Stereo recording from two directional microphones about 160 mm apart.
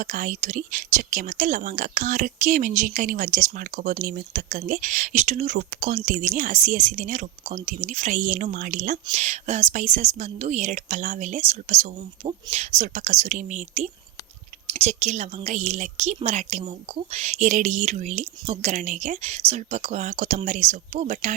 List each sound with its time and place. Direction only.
0.0 s a woman's voice: 55° right (ahead or behind)